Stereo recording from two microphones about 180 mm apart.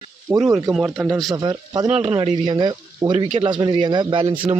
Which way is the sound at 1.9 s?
30° right (ahead or behind).